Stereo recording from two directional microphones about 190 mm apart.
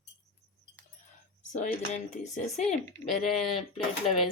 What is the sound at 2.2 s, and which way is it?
Speech, 40° left (ahead or behind).